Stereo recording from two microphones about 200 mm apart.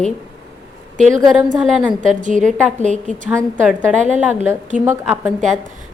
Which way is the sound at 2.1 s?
40° right (ahead or behind).